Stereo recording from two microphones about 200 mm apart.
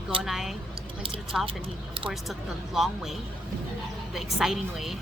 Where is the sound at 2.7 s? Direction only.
Centre (ahead or behind).